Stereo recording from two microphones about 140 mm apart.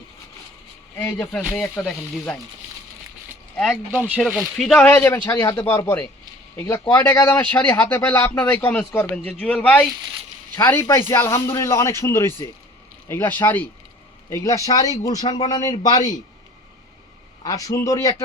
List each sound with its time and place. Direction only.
0.9 s speech: 10° left (ahead or behind)
1.4 s speech: centre (ahead or behind)
4.2 s a man's voice: centre (ahead or behind); by 16.1 s 30° left (ahead or behind)
17.4 s a man's voice: 25° left (ahead or behind)